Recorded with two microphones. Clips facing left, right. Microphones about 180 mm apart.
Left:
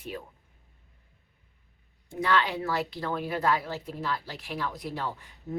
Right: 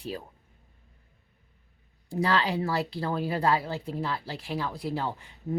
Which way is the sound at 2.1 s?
35° right (ahead or behind).